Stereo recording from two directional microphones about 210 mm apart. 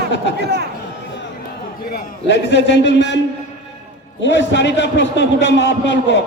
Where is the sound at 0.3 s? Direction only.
50° right (ahead or behind).